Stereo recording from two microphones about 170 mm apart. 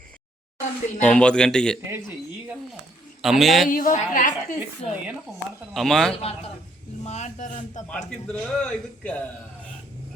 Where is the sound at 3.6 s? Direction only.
55° left (ahead or behind).